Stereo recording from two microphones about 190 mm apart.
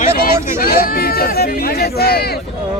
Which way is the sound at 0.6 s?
50° left (ahead or behind).